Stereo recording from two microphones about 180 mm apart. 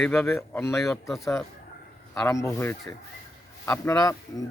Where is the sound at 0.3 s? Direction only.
15° left (ahead or behind).